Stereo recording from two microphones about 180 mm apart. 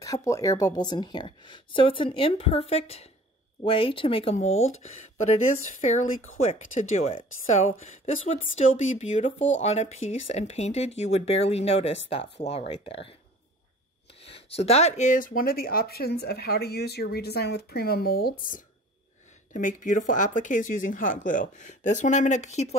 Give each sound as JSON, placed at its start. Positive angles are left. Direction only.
{"t": 0.0, "sound": "a woman's voice", "side_deg": 20}
{"t": 14.2, "sound": "speech", "side_deg": 35}